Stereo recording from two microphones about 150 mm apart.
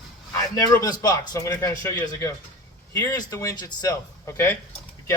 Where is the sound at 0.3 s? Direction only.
25° left (ahead or behind).